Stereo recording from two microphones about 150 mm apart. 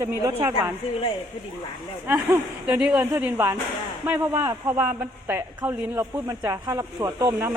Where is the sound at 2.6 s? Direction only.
5° right (ahead or behind).